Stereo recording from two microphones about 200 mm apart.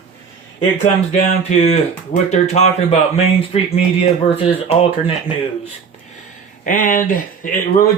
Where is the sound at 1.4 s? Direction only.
35° left (ahead or behind).